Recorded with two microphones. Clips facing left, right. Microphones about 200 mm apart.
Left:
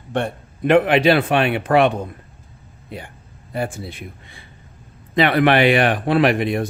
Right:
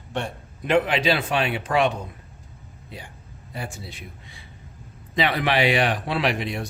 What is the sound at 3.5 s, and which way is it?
A man's voice, 55° left (ahead or behind).